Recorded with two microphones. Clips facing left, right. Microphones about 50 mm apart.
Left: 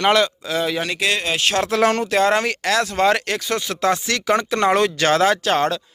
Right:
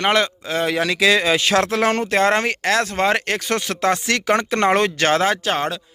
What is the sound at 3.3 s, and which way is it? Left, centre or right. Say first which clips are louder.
Speech: right 1 dB; right.